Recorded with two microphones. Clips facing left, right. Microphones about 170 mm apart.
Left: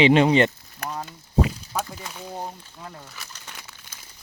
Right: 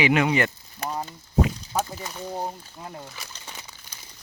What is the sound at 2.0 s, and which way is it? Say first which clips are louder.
Speech: right 2 dB; centre (ahead or behind).